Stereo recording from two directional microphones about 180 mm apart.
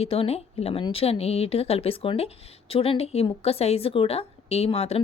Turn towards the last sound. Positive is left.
turn(degrees=35)  # may be behind; listen again after turning